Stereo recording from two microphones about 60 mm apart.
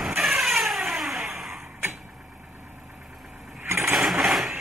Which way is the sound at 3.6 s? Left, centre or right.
Right.